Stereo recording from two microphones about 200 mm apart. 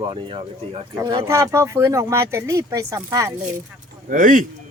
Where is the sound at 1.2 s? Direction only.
15° right (ahead or behind).